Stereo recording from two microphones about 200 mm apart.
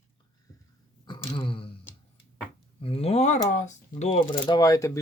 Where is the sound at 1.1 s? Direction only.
25° left (ahead or behind).